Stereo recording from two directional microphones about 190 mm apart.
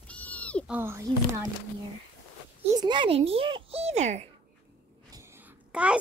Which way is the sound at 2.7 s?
25° right (ahead or behind).